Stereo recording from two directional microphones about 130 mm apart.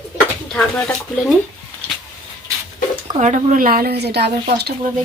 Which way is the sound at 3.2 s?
65° right (ahead or behind).